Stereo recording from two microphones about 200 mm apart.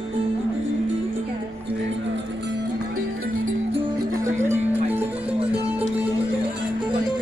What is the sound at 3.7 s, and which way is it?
Music, 15° right (ahead or behind).